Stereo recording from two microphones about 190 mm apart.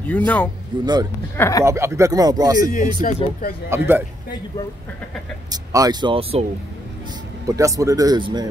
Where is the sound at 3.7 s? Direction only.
10° right (ahead or behind).